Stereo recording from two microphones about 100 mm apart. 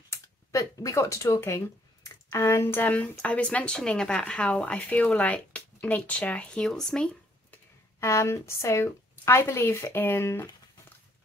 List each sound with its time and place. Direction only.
0.1 s speech: 30° left (ahead or behind); by 7.1 s 5° left (ahead or behind)
8.0 s a woman's voice: 30° left (ahead or behind)